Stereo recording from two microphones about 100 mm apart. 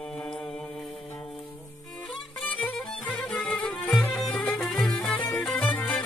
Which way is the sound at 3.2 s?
10° left (ahead or behind).